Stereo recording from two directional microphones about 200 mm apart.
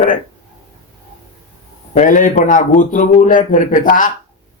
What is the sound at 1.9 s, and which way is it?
A man's voice, 40° left (ahead or behind).